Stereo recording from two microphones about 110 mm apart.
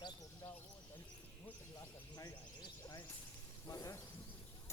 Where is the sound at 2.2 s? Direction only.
35° left (ahead or behind).